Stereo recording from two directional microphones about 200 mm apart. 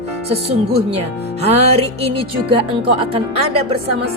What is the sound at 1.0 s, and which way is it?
Speech, 30° right (ahead or behind).